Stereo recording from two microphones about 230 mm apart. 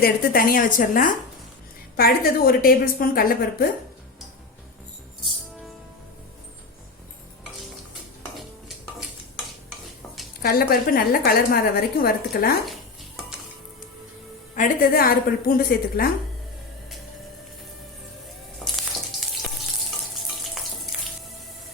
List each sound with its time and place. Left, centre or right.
0.0 s a woman's voice: left
10.4 s a woman's voice: left
14.5 s a woman's voice: left